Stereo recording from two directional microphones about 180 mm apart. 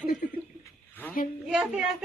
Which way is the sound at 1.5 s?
5° right (ahead or behind).